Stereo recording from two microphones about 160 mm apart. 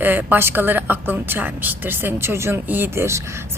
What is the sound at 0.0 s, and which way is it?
A woman's voice, 10° right (ahead or behind).